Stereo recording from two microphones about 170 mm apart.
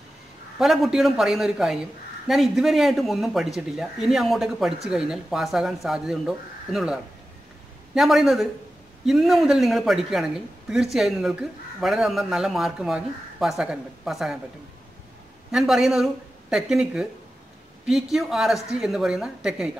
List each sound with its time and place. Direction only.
0.6 s speech: centre (ahead or behind)
15.5 s speech: centre (ahead or behind)